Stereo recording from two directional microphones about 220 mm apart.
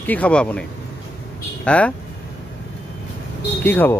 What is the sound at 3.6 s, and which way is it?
Speech, 10° left (ahead or behind).